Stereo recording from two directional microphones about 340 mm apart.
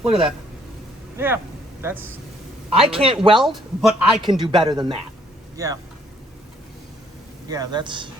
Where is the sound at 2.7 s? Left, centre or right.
Centre.